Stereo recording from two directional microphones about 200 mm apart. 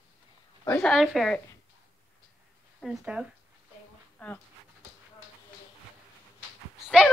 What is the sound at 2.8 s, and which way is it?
A woman's voice, 5° right (ahead or behind).